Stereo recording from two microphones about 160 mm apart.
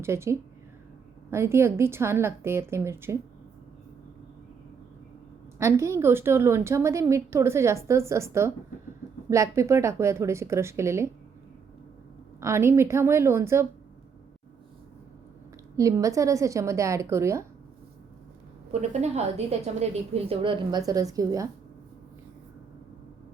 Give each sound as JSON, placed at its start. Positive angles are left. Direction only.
{"t": 0.0, "sound": "a woman's voice", "side_deg": -15}
{"t": 5.5, "sound": "a woman's voice", "side_deg": -20}
{"t": 12.4, "sound": "a woman's voice", "side_deg": -15}
{"t": 15.7, "sound": "a woman's voice", "side_deg": -20}
{"t": 18.7, "sound": "a woman's voice", "side_deg": -45}